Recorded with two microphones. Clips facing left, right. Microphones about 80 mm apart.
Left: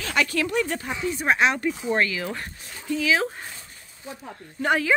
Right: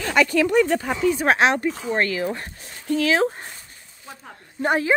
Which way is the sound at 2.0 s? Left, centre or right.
Right.